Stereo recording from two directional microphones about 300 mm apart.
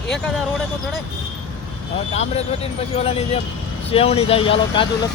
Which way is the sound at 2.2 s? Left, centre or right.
Left.